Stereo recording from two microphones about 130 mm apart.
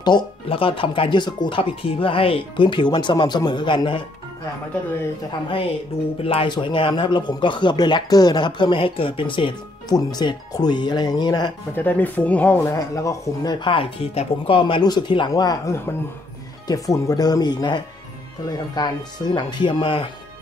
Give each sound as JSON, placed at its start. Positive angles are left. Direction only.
{"t": 0.0, "sound": "speech", "side_deg": 40}
{"t": 6.2, "sound": "speech", "side_deg": 45}
{"t": 11.7, "sound": "speech", "side_deg": 15}
{"t": 12.5, "sound": "speech", "side_deg": 25}